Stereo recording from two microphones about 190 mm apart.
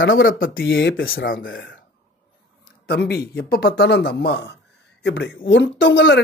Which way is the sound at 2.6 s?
55° left (ahead or behind).